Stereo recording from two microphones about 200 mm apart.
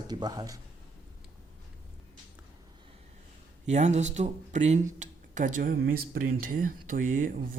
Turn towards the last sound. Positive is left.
turn(degrees=-40)  # may be behind; listen again after turning